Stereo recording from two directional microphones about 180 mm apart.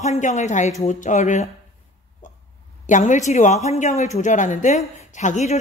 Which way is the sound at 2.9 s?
45° left (ahead or behind).